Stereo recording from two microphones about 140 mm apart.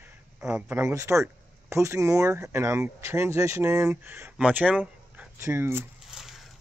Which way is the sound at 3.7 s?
10° right (ahead or behind).